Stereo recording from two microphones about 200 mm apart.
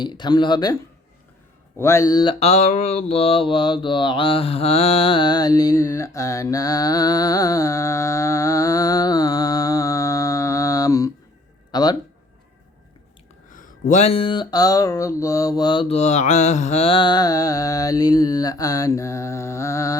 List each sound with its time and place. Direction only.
0.0 s mantra: 20° left (ahead or behind)
1.8 s mantra: 15° left (ahead or behind)
2.4 s mantra: 35° left (ahead or behind); by 11.1 s 15° left (ahead or behind)
11.7 s speech: 20° left (ahead or behind)
13.5 s mantra: 40° left (ahead or behind); by 20.0 s 15° left (ahead or behind)